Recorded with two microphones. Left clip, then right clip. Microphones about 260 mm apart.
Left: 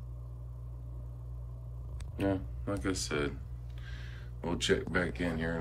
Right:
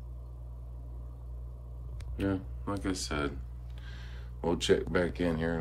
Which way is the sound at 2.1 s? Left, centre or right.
Centre.